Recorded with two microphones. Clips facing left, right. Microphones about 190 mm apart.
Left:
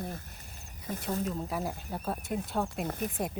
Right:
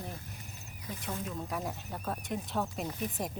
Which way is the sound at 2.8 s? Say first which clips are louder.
Left 3 dB; 55° left (ahead or behind).